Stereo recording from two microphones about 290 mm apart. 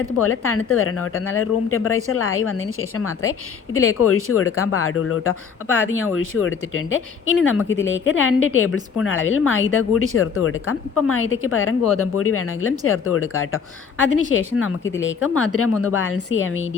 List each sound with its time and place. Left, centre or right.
0.2 s speech: left